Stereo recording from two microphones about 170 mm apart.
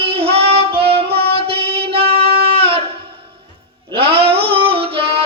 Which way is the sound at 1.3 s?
35° right (ahead or behind).